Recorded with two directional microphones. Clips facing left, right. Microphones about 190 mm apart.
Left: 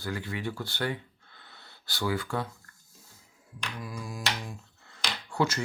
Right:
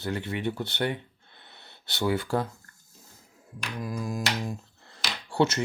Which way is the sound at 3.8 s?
40° right (ahead or behind).